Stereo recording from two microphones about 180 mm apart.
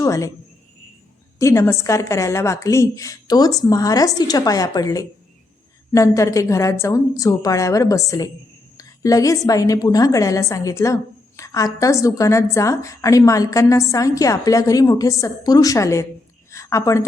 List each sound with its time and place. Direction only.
0.0 s speech: 20° left (ahead or behind)
1.4 s a woman's voice: 15° left (ahead or behind)
16.5 s a sound: 15° left (ahead or behind)